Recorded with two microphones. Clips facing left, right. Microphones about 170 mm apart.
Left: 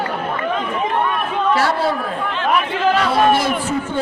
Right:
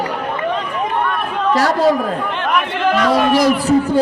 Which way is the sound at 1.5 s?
40° right (ahead or behind).